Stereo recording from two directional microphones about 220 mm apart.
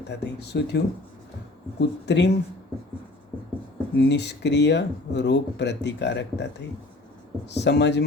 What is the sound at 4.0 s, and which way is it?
Speech, 50° left (ahead or behind).